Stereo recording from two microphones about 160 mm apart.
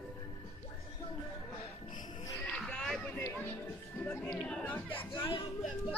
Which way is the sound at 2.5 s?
5° left (ahead or behind).